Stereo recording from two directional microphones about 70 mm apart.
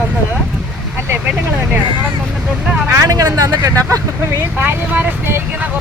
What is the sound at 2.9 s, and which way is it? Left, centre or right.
Vehicle, right.